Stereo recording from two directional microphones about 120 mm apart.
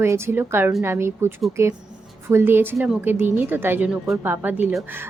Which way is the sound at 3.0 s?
15° right (ahead or behind).